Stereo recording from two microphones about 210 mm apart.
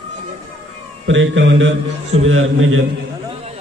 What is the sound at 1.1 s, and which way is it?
A man's voice, 65° right (ahead or behind).